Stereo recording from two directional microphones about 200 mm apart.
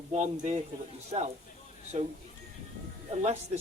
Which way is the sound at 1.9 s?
35° right (ahead or behind).